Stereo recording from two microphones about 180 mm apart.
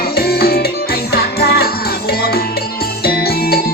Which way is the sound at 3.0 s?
60° left (ahead or behind).